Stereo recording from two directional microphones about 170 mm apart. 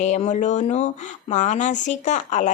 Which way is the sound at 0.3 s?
45° left (ahead or behind).